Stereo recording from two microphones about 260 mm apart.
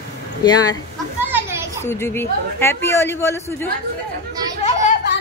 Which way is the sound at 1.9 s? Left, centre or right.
Centre.